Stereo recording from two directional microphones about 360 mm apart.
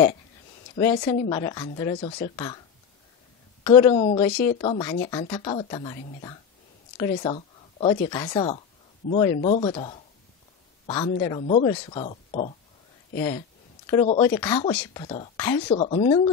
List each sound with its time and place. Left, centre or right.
0.7 s speech: centre
3.6 s speech: centre
4.3 s speech: left
4.6 s speech: centre
7.0 s speech: centre
13.8 s speech: centre